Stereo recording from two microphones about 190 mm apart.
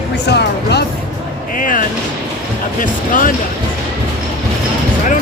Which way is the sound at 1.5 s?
45° left (ahead or behind).